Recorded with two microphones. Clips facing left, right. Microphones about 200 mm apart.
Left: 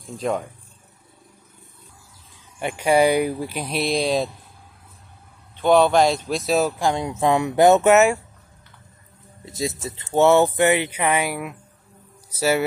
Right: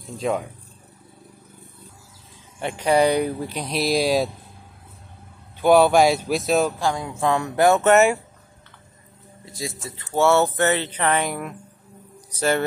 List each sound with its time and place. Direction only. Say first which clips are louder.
0.2 s speech: even; 5° right (ahead or behind)
2.6 s speech: left 1 dB; 5° left (ahead or behind)
5.6 s speech: right 1 dB; 10° right (ahead or behind)
6.8 s speech: left 2 dB; 20° left (ahead or behind)
7.9 s speech: left 1 dB; centre (ahead or behind)
9.5 s speech: left 5 dB; 25° left (ahead or behind); by 12.6 s 10° left (ahead or behind)